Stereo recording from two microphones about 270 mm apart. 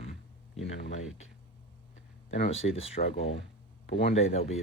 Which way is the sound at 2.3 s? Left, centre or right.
Left.